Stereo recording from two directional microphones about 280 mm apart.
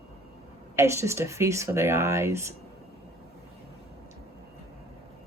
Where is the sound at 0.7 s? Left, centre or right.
Centre.